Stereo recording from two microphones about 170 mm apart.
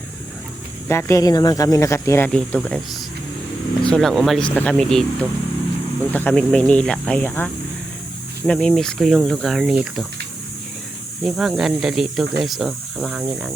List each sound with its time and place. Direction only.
0.9 s speech: 15° left (ahead or behind)
2.3 s speech: 5° left (ahead or behind)
3.8 s speech: 5° left (ahead or behind)
11.2 s speech: centre (ahead or behind)